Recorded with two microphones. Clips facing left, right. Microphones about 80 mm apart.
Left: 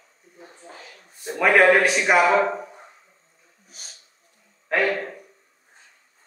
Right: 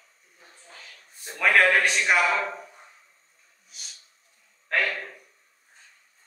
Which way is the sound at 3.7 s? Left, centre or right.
Left.